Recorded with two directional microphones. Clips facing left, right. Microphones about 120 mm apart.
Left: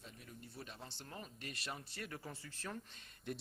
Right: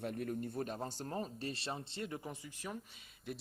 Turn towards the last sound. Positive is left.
turn(degrees=-5)  # may be behind; listen again after turning